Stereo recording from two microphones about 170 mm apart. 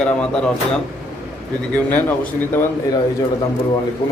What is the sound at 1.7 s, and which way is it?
A man's voice, 10° left (ahead or behind).